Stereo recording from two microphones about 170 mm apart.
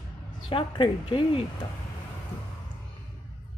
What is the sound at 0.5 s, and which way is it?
Speech, 30° left (ahead or behind).